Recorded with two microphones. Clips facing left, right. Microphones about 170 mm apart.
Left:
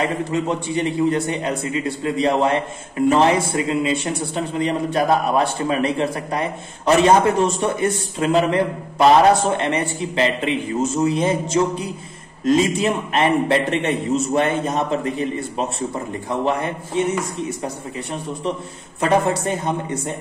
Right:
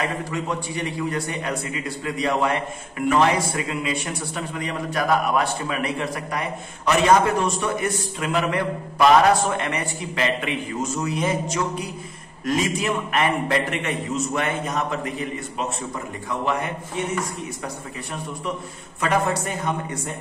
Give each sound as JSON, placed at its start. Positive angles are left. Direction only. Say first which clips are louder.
{"t": 0.0, "sound": "speech", "louder": "left 5 dB", "side_deg": 25}
{"t": 18.9, "sound": "speech", "louder": "left 4 dB", "side_deg": 30}